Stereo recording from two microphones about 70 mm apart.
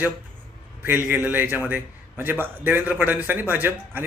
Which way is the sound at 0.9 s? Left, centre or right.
Right.